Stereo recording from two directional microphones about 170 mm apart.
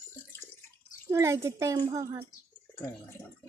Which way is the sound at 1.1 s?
15° right (ahead or behind).